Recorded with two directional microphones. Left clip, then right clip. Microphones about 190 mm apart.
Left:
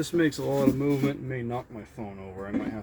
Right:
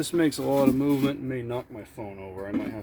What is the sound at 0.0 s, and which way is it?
Speech, 45° right (ahead or behind).